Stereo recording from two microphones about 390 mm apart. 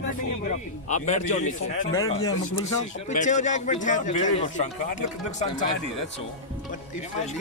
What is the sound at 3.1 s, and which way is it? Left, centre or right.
A man's voice, centre.